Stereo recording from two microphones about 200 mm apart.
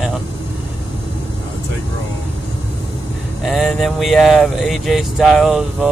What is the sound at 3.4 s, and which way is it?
Speech, centre (ahead or behind).